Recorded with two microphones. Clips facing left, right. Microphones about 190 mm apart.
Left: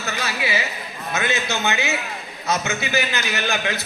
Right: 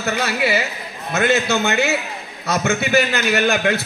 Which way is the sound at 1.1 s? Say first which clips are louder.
Right 7 dB; 55° right (ahead or behind).